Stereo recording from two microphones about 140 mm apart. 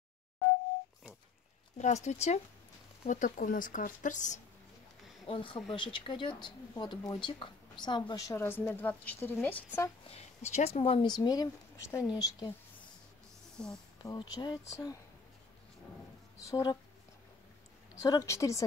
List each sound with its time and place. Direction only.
1.8 s speech: 55° left (ahead or behind)
3.1 s speech: 75° left (ahead or behind)
5.2 s speech: 40° left (ahead or behind); by 9.8 s 15° left (ahead or behind)
10.0 s speech: 50° left (ahead or behind)
11.1 s speech: 30° left (ahead or behind)
13.6 s speech: 5° left (ahead or behind)
14.0 s speech: 30° left (ahead or behind)
16.4 s speech: 20° left (ahead or behind)
18.0 s speech: 25° left (ahead or behind)